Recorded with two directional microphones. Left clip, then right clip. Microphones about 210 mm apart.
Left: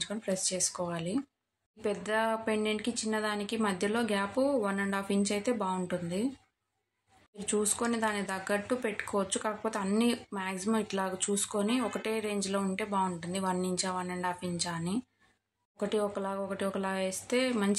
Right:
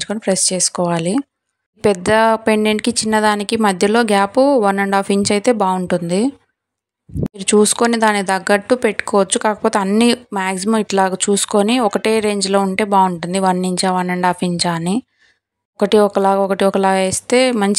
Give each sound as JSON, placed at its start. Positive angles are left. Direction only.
{"t": 0.0, "sound": "speech", "side_deg": -45}
{"t": 7.3, "sound": "speech", "side_deg": -45}